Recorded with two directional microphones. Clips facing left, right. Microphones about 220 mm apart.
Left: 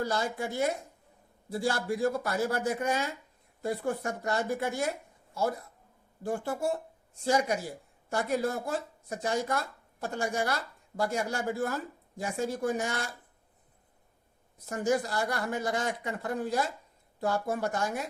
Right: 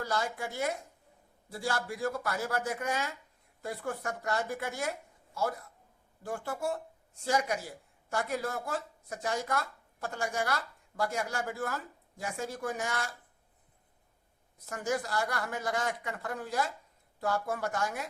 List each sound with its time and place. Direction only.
0.0 s speech: 25° left (ahead or behind)
14.7 s speech: 30° left (ahead or behind)